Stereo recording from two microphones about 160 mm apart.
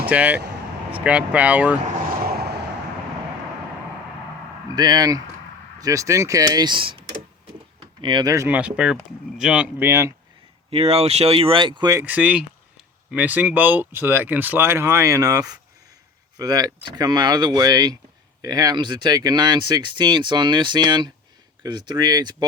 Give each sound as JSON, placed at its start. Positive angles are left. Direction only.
{"t": 0.0, "sound": "speech", "side_deg": -10}
{"t": 2.1, "sound": "vehicle", "side_deg": -75}
{"t": 4.7, "sound": "speech", "side_deg": -25}
{"t": 8.0, "sound": "speech", "side_deg": -25}
{"t": 10.7, "sound": "speech", "side_deg": -35}